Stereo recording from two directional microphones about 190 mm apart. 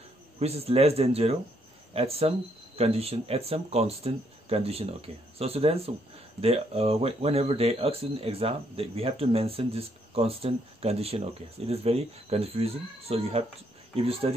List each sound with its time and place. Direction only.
0.4 s speech: 35° right (ahead or behind)